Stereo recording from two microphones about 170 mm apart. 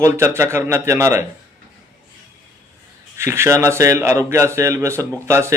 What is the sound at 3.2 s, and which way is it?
Speech, 15° right (ahead or behind).